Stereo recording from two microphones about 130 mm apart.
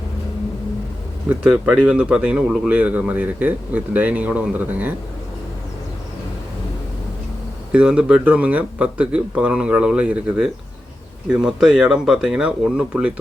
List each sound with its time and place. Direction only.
1.3 s speech: 5° right (ahead or behind)
7.7 s speech: 10° right (ahead or behind)